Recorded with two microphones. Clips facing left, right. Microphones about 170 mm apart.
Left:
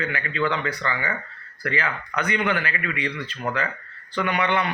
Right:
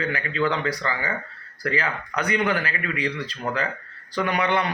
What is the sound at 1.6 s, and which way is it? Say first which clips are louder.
A man's voice: right 1 dB; 35° right (ahead or behind).